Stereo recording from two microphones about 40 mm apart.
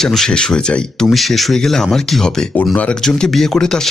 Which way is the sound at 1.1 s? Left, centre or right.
Centre.